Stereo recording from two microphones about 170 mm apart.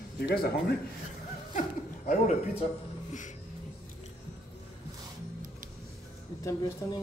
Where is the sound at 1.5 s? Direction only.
50° left (ahead or behind).